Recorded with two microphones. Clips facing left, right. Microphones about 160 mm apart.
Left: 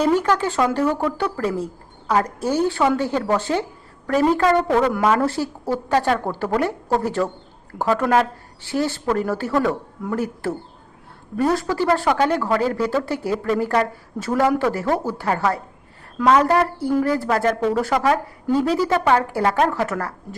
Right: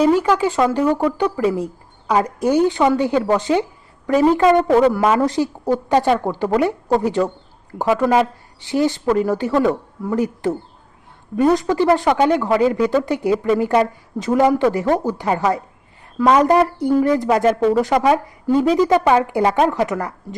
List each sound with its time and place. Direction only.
0.0 s a woman's voice: 10° right (ahead or behind)